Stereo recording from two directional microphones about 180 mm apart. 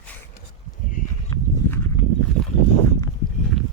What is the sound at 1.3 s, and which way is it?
Livestock, 20° left (ahead or behind).